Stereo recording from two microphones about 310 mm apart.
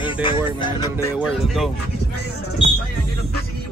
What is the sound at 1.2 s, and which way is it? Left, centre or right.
Speech, centre.